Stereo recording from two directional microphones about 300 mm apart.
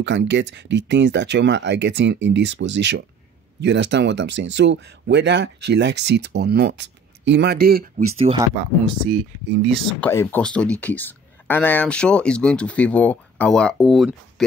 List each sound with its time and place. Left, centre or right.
0.0 s speech: right
8.2 s speech: centre
9.7 s speech: centre